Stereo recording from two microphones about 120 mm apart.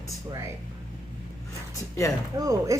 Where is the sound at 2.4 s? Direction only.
30° right (ahead or behind).